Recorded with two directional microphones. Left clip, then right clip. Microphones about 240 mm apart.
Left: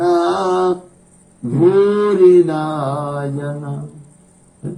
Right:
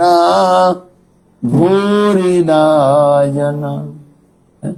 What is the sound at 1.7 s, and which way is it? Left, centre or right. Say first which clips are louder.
Mantra: right 1 dB; right.